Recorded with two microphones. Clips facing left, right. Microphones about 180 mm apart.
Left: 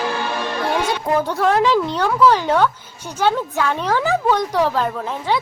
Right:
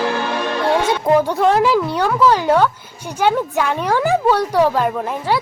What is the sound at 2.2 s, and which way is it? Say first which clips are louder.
Speech: right 1 dB; 10° right (ahead or behind).